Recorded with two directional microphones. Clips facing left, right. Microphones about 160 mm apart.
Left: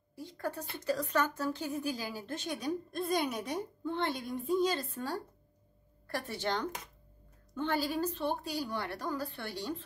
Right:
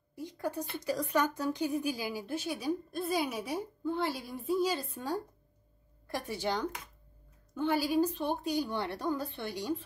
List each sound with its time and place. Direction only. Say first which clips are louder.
0.1 s speech: right 2 dB; 15° right (ahead or behind)